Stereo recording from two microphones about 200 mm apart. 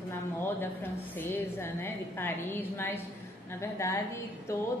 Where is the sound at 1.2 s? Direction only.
10° left (ahead or behind).